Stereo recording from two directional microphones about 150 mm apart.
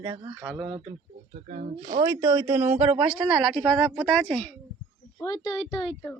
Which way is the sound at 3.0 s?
Centre (ahead or behind).